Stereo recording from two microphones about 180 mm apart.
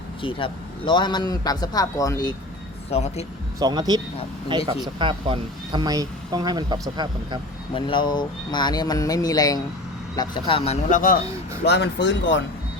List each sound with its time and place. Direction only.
0.2 s a man's voice: 30° left (ahead or behind)
2.9 s speech: 35° left (ahead or behind)
3.6 s speech: 25° right (ahead or behind)
7.7 s a man's voice: 30° left (ahead or behind)
10.8 s speech: 45° left (ahead or behind)
11.6 s speech: 70° left (ahead or behind); by 12.4 s 85° left